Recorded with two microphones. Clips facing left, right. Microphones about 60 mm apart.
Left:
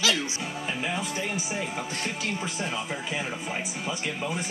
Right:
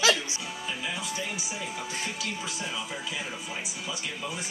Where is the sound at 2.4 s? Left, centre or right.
Left.